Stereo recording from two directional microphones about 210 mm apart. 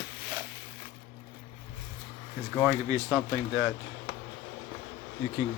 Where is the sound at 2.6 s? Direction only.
15° right (ahead or behind).